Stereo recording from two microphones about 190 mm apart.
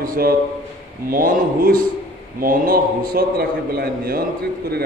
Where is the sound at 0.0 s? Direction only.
50° right (ahead or behind).